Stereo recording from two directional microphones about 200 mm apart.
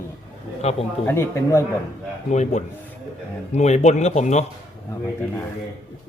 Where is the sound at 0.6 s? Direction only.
30° left (ahead or behind).